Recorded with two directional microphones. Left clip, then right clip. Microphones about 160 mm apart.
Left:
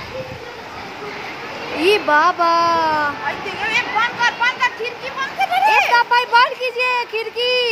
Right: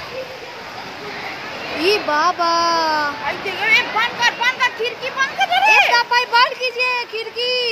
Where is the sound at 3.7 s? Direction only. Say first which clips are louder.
Right 2 dB; 55° right (ahead or behind).